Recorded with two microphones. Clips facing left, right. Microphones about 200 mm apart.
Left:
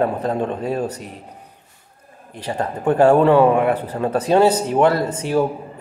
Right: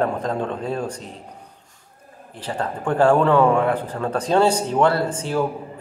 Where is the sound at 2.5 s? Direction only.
20° left (ahead or behind).